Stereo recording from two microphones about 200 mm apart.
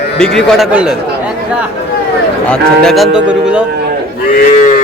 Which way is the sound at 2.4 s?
5° left (ahead or behind).